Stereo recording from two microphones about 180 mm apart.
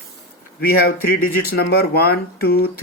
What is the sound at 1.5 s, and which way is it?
Speech, 60° left (ahead or behind).